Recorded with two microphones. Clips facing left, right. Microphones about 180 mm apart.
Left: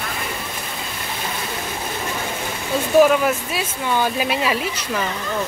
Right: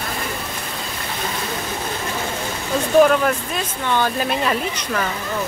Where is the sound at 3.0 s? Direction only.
5° left (ahead or behind).